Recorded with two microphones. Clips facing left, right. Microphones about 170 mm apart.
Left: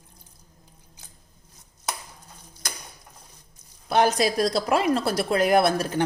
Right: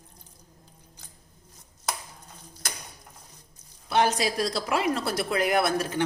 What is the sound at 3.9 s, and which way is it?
A woman's voice, 45° left (ahead or behind).